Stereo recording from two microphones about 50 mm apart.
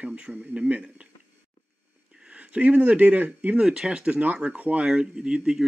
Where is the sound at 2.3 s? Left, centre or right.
Right.